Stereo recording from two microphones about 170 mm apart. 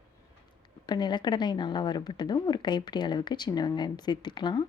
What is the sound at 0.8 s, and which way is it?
A woman's voice, 25° left (ahead or behind).